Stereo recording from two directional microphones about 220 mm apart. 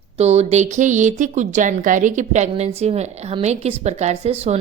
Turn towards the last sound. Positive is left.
turn(degrees=-30)  # may be behind; listen again after turning